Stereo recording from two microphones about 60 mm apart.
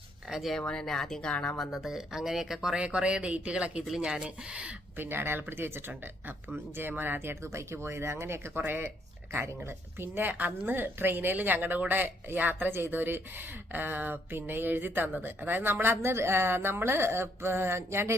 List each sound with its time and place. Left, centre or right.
0.3 s speech: centre
0.8 s speech: centre
1.7 s speech: centre
2.7 s speech: centre
4.9 s a woman's voice: right